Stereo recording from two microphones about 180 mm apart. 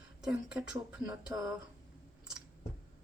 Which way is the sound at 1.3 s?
15° right (ahead or behind).